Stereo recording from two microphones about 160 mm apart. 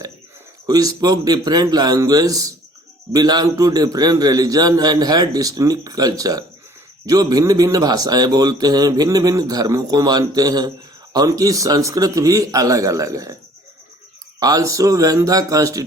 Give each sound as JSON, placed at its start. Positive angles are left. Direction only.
{"t": 0.7, "sound": "speech", "side_deg": -20}
{"t": 14.3, "sound": "speech", "side_deg": -20}